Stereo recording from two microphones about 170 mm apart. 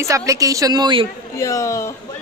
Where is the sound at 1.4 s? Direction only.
20° left (ahead or behind).